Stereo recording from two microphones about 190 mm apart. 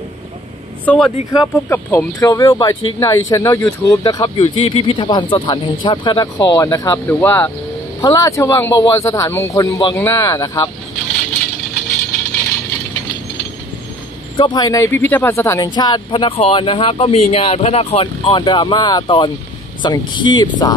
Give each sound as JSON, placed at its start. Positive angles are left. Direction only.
{"t": 0.8, "sound": "speech", "side_deg": 0}
{"t": 1.3, "sound": "speech", "side_deg": 15}
{"t": 14.3, "sound": "speech", "side_deg": 25}